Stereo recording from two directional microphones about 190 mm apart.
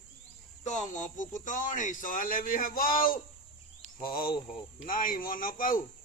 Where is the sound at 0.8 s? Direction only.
40° left (ahead or behind).